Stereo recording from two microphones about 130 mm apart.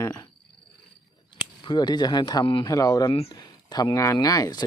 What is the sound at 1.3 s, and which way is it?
Speech, 35° left (ahead or behind).